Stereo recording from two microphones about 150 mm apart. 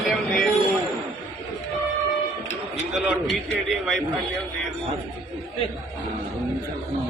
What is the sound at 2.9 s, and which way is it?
A man's voice, centre (ahead or behind).